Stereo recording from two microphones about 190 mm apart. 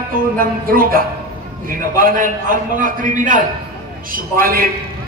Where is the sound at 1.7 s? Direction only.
45° right (ahead or behind).